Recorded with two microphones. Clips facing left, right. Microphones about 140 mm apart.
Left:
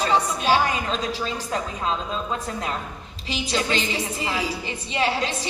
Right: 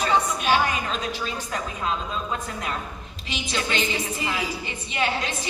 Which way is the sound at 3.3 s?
35° left (ahead or behind).